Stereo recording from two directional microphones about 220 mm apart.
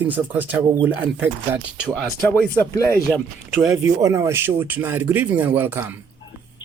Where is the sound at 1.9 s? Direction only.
5° left (ahead or behind).